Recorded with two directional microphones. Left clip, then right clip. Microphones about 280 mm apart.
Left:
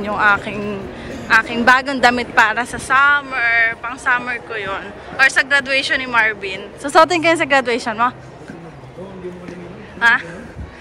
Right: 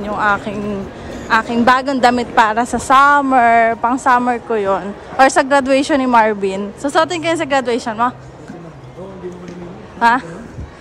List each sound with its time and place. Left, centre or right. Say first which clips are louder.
0.0 s a woman's voice: left 1 dB; centre
9.9 s a woman's voice: right 1 dB; centre